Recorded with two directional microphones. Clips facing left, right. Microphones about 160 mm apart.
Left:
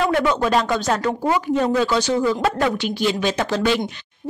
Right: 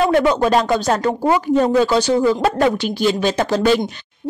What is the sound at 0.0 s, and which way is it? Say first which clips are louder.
Speech: right 4 dB; 35° right (ahead or behind).